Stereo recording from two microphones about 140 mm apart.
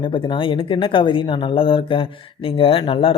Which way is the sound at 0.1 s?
35° left (ahead or behind).